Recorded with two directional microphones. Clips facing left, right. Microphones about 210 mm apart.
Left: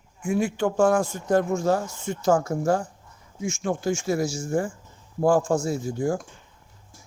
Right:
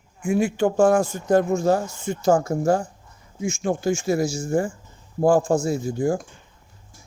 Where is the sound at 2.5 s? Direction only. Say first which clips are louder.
Right 3 dB; 25° right (ahead or behind).